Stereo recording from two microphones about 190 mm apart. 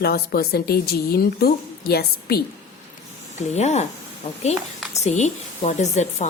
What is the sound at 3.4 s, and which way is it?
Speech, 35° left (ahead or behind).